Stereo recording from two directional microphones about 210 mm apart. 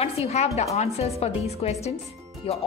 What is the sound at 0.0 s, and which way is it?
A woman's voice, 30° left (ahead or behind).